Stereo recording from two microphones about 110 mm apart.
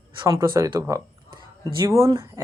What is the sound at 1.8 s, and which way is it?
Speech, 25° right (ahead or behind).